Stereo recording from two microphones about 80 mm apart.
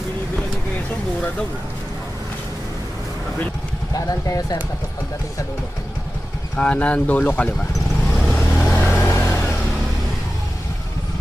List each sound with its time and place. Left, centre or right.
3.9 s speech: left
6.6 s speech: centre
8.3 s vehicle: left